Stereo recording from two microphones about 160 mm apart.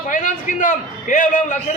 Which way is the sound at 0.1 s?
55° left (ahead or behind).